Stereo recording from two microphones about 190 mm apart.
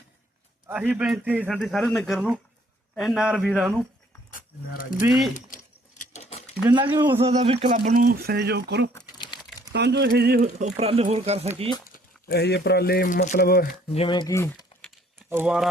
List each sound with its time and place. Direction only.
0.7 s a man's voice: 5° right (ahead or behind)
4.3 s speech: 45° left (ahead or behind)
6.0 s patter: 35° left (ahead or behind)
6.7 s speech: 25° right (ahead or behind)
7.7 s speech: 45° right (ahead or behind); by 8.9 s 60° right (ahead or behind)
9.0 s crumpling: 20° left (ahead or behind)
9.7 s speech: 65° right (ahead or behind)
10.4 s speech: 40° right (ahead or behind)
11.9 s speech: 60° left (ahead or behind)
13.9 s speech: 30° left (ahead or behind)
15.3 s speech: 5° right (ahead or behind)